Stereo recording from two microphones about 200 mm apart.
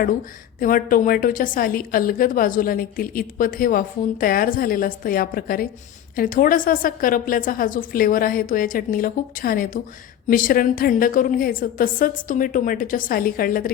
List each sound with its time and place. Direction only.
0.6 s a woman's voice: 45° left (ahead or behind)